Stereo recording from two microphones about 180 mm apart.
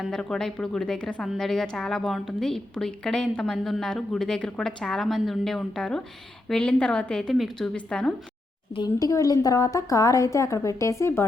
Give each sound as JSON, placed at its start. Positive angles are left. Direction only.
{"t": 0.0, "sound": "a woman's voice", "side_deg": 5}
{"t": 8.7, "sound": "a woman's voice", "side_deg": 20}